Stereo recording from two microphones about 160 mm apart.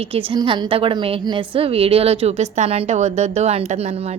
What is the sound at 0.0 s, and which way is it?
A woman's voice, 35° right (ahead or behind).